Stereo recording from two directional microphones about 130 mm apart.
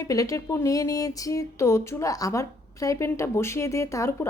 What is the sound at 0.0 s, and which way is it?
Speech, 25° left (ahead or behind).